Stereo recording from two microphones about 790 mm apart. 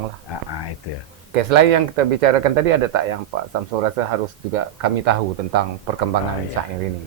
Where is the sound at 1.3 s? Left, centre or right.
Right.